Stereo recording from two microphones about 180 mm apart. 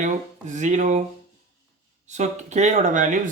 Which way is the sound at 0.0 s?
40° right (ahead or behind).